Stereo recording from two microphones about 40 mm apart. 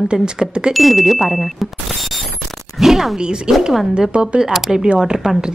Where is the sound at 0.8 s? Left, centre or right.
Centre.